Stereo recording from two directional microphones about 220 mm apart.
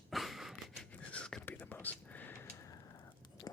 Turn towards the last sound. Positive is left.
turn(degrees=15)  # may be behind; listen again after turning